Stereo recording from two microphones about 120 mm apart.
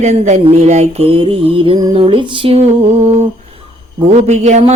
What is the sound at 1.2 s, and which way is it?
Music, 50° right (ahead or behind).